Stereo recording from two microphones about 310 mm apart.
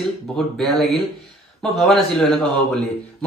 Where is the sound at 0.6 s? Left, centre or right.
Centre.